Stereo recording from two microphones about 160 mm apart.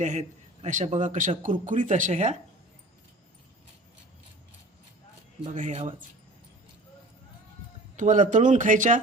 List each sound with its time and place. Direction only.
0.0 s a man's voice: 45° right (ahead or behind)
5.5 s a man's voice: 50° right (ahead or behind)
7.9 s a man's voice: 50° right (ahead or behind)